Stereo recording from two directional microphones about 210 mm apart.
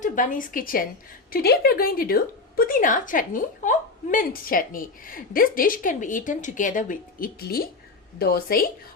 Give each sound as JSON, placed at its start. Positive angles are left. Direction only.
{"t": 0.0, "sound": "a woman's voice", "side_deg": 40}